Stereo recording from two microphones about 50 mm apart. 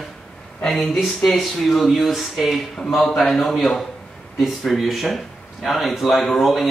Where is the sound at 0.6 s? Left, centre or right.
Centre.